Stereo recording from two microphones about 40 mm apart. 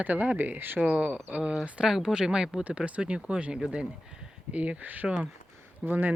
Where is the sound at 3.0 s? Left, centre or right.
Right.